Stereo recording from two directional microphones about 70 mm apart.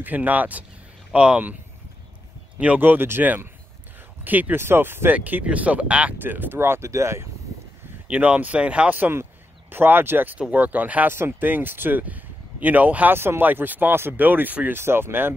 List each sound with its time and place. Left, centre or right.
0.0 s speech: right
2.6 s speech: right
5.1 s speech: right
6.2 s speech: right
8.1 s speech: centre
9.1 s speech: right
14.8 s speech: right